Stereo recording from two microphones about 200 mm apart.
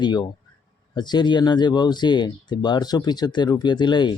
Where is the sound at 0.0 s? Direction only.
20° left (ahead or behind).